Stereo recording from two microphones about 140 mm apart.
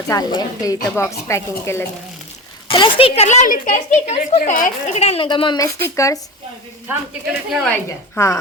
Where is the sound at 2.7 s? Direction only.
40° left (ahead or behind); by 5.0 s 70° left (ahead or behind).